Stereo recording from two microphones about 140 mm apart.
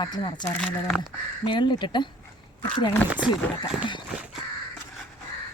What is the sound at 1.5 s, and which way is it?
Speech, 35° left (ahead or behind).